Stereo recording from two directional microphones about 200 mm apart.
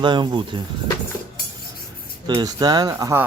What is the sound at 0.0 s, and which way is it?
Speech, 20° right (ahead or behind).